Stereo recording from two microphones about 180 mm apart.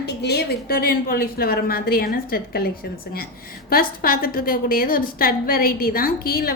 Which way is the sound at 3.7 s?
55° left (ahead or behind).